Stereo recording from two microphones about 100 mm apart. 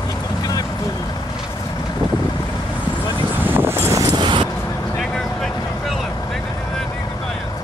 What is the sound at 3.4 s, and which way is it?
Vehicle, 20° right (ahead or behind).